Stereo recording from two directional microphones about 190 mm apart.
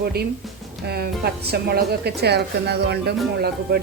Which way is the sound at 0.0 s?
55° right (ahead or behind).